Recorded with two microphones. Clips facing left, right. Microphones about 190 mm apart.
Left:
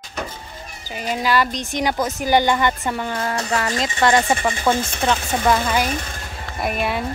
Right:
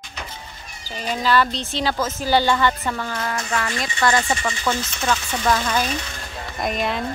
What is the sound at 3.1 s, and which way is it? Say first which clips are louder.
Speech: left 3 dB; 30° left (ahead or behind).